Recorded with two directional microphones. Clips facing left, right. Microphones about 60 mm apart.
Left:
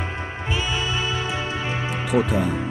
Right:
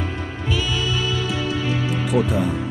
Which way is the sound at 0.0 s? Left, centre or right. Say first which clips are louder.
Right 2 dB; left.